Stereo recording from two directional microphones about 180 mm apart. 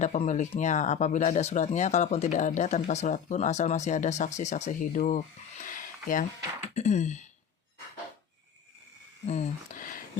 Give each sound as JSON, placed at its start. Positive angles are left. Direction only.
{"t": 0.0, "sound": "speech", "side_deg": 40}
{"t": 9.2, "sound": "speech", "side_deg": 35}